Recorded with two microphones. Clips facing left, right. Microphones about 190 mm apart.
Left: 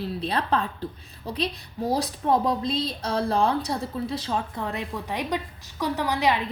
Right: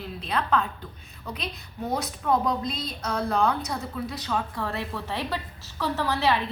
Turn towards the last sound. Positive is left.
turn(degrees=15)  # may be behind; listen again after turning